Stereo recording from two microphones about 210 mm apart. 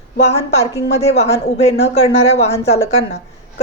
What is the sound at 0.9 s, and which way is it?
A woman's voice, 30° left (ahead or behind).